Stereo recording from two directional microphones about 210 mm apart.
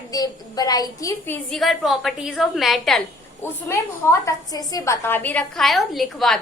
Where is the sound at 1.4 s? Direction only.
Centre (ahead or behind).